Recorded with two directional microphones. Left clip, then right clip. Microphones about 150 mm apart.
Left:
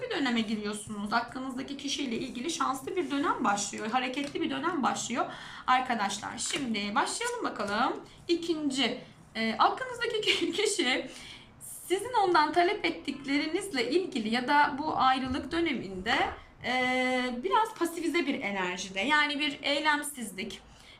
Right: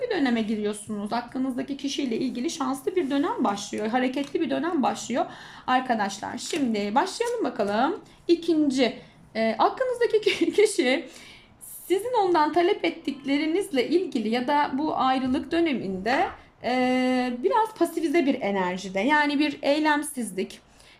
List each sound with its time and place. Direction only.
0.1 s a woman's voice: 35° right (ahead or behind)